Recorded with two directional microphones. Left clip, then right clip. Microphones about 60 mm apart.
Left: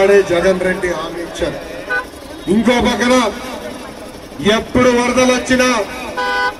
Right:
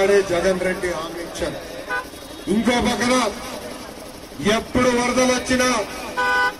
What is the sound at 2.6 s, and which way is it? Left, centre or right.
Speech, left.